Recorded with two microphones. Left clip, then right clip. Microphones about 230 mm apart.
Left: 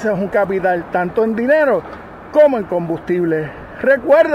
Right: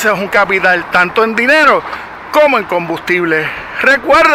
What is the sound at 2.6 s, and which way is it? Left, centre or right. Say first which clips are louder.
Speech: right 4 dB; right.